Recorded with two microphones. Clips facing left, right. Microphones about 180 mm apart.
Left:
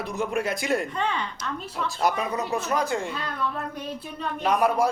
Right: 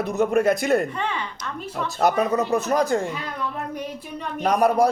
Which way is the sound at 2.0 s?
45° right (ahead or behind).